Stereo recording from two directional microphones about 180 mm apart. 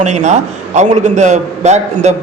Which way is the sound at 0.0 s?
40° right (ahead or behind).